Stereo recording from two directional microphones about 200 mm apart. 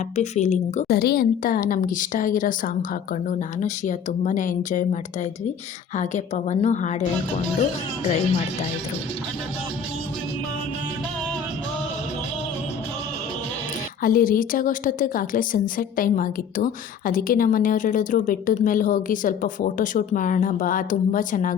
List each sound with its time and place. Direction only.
0.2 s speech: 35° left (ahead or behind)
0.9 s a woman's voice: 50° left (ahead or behind)
6.0 s speech: 35° left (ahead or behind)
14.0 s a woman's voice: 45° left (ahead or behind)